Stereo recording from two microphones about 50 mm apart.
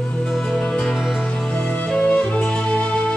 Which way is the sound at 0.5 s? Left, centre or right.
Centre.